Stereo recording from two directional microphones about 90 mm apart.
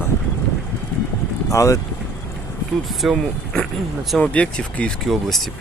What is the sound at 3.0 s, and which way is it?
Speech, centre (ahead or behind).